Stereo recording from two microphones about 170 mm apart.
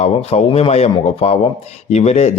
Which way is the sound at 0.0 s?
40° left (ahead or behind).